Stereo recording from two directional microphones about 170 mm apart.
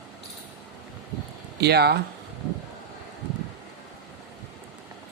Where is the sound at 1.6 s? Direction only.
70° right (ahead or behind).